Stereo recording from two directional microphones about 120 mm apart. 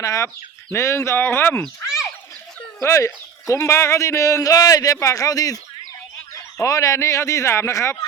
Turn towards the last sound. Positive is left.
turn(degrees=25)  # may be behind; listen again after turning